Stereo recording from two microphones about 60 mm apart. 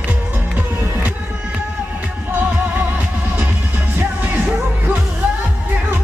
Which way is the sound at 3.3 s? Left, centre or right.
Right.